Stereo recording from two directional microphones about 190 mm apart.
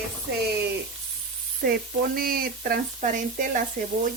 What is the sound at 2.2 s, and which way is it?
Speech, 50° right (ahead or behind).